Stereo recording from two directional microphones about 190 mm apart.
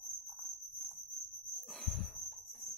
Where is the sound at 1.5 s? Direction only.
Centre (ahead or behind).